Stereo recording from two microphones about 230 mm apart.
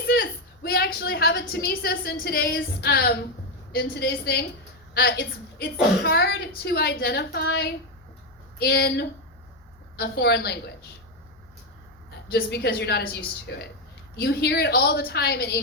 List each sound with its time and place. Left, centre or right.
0.1 s a woman's voice: left
12.3 s a woman's voice: left